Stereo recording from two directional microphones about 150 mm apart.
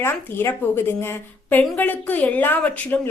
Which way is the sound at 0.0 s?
15° left (ahead or behind).